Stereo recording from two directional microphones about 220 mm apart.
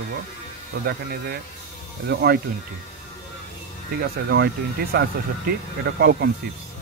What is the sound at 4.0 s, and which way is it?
Speech, 45° right (ahead or behind).